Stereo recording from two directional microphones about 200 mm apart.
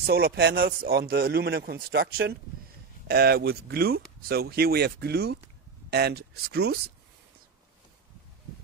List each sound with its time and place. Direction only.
0.0 s speech: 50° right (ahead or behind)